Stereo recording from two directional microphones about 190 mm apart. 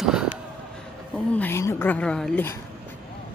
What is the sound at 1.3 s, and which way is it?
Speech, 10° left (ahead or behind).